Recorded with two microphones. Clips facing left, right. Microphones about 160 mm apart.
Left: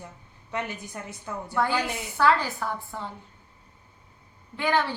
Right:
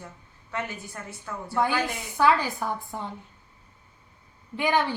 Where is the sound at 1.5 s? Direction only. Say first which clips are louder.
Right 1 dB; 15° right (ahead or behind).